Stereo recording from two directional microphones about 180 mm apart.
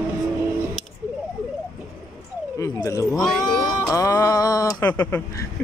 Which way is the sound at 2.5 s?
20° left (ahead or behind).